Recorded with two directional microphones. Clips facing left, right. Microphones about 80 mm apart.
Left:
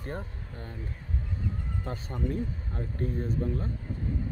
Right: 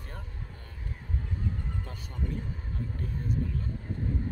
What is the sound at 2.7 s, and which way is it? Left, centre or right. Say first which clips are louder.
Speech: left 3 dB; left.